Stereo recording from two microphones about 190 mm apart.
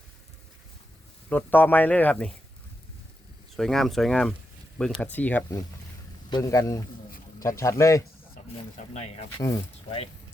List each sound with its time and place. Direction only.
1.3 s speech: 10° left (ahead or behind)
3.5 s speech: centre (ahead or behind)
8.4 s snake: 45° left (ahead or behind)
8.8 s speech: 35° left (ahead or behind)